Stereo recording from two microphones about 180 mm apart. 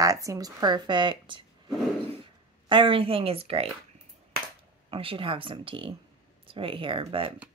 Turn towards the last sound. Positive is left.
turn(degrees=-30)  # may be behind; listen again after turning